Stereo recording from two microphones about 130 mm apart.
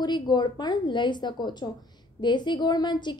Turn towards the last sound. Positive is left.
turn(degrees=35)  # may be behind; listen again after turning